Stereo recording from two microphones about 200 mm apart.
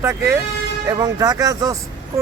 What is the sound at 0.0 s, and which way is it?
Speech, 15° right (ahead or behind).